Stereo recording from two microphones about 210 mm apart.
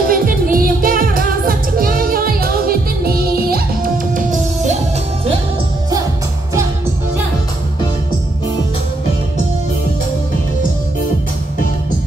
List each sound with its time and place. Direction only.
0.1 s music: 45° right (ahead or behind)